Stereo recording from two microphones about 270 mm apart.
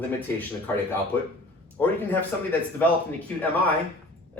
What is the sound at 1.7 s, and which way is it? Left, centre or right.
Speech, centre.